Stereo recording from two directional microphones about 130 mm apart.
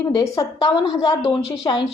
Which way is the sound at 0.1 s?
30° left (ahead or behind).